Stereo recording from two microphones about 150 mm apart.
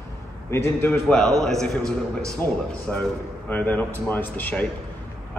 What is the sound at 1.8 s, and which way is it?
Speech, 20° right (ahead or behind).